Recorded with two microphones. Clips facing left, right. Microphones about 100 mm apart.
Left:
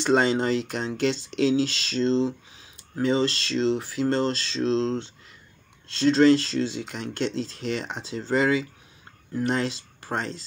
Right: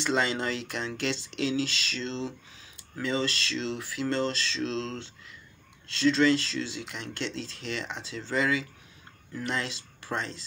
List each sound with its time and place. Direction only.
0.0 s speech: 35° left (ahead or behind)